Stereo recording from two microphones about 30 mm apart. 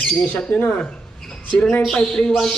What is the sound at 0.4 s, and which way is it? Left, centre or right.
Speech, left.